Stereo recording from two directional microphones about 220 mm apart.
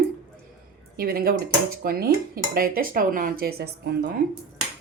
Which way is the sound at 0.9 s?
40° right (ahead or behind).